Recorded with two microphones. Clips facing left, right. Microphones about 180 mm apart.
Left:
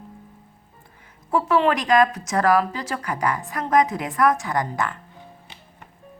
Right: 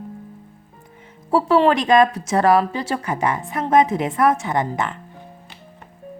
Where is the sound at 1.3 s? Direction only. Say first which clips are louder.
Right 4 dB; 35° right (ahead or behind).